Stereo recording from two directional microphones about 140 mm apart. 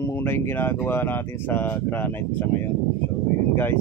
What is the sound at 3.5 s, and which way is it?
Speech, 15° left (ahead or behind).